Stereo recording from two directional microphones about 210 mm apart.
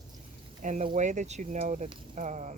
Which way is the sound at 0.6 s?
35° right (ahead or behind).